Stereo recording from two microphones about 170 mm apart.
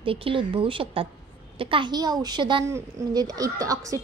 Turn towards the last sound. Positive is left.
turn(degrees=-20)  # may be behind; listen again after turning